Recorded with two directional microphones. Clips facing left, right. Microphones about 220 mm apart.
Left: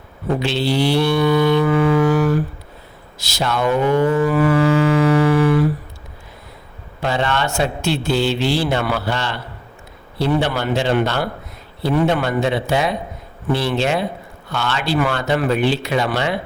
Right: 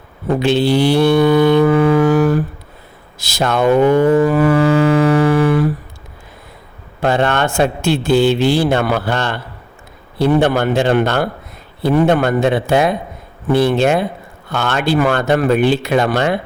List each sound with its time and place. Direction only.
0.4 s music: 50° right (ahead or behind)
3.2 s speech: 50° right (ahead or behind)
4.1 s a sound: 45° right (ahead or behind)
7.0 s a man's voice: 55° right (ahead or behind)